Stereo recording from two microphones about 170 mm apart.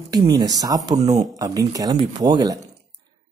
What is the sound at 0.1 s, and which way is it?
Speech, 25° right (ahead or behind).